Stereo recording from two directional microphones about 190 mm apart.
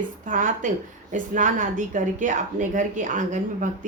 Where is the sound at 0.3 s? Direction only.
40° right (ahead or behind).